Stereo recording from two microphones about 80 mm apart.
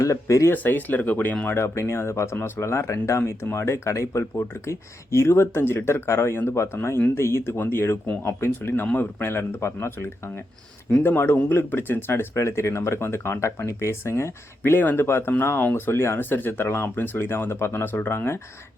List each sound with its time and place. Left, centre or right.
0.0 s speech: left
0.5 s speech: left